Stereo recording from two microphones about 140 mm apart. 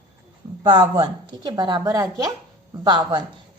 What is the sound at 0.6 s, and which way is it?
A woman's voice, 30° right (ahead or behind).